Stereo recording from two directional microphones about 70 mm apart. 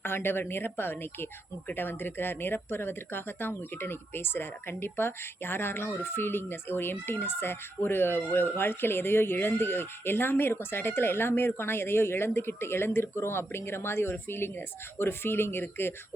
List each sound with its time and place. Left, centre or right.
0.0 s speech: left